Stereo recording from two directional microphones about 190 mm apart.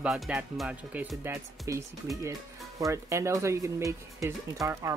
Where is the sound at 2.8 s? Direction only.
15° right (ahead or behind).